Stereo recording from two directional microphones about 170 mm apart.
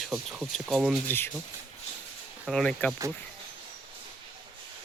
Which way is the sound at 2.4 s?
5° left (ahead or behind).